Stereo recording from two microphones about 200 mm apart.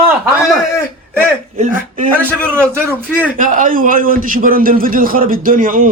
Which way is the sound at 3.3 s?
40° right (ahead or behind).